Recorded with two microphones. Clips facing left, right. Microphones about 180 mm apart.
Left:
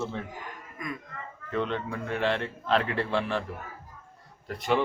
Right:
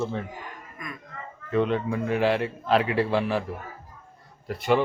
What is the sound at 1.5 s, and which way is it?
A man's voice, 5° right (ahead or behind).